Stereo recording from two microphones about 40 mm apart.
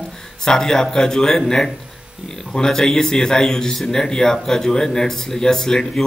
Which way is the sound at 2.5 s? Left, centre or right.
Centre.